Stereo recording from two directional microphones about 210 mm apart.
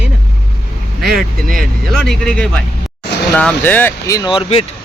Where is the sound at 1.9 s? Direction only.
Centre (ahead or behind); by 4.6 s 25° left (ahead or behind).